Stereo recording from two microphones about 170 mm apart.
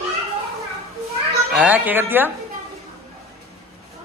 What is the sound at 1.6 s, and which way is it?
Speech, 10° right (ahead or behind).